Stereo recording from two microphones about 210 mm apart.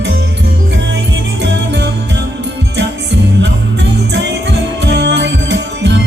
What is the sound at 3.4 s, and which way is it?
Music, 55° right (ahead or behind).